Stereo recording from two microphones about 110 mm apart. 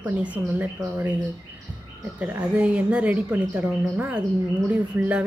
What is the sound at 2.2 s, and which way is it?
A woman's voice, 10° right (ahead or behind).